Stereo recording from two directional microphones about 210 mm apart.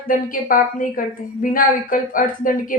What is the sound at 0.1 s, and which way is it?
A woman's voice, 40° left (ahead or behind).